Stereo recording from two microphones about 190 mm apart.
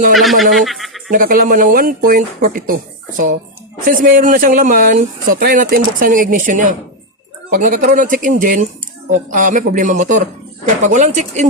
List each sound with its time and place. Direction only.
0.1 s speech: centre (ahead or behind)
0.5 s a sound: centre (ahead or behind)
1.1 s speech: 50° right (ahead or behind)
3.8 s speech: 45° right (ahead or behind)